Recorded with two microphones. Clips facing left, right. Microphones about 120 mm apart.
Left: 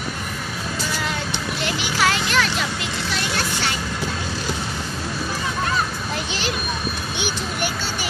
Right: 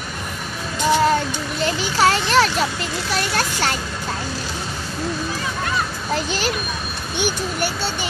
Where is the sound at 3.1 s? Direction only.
45° right (ahead or behind).